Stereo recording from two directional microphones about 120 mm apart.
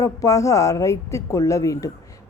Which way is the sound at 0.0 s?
30° left (ahead or behind).